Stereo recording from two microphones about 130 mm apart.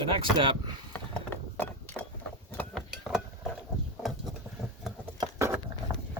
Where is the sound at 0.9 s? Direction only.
15° left (ahead or behind).